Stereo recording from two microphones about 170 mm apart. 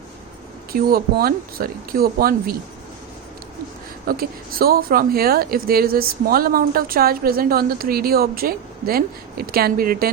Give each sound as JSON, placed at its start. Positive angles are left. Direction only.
{"t": 0.7, "sound": "a woman's voice", "side_deg": -60}
{"t": 4.0, "sound": "a woman's voice", "side_deg": -60}